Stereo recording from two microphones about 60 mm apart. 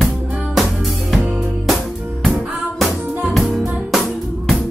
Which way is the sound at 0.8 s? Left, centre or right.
Centre.